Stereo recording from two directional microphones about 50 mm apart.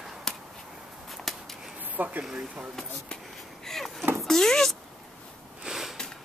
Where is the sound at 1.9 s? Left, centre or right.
Right.